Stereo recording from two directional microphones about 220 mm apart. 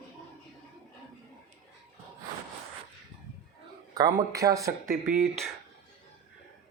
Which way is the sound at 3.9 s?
15° right (ahead or behind).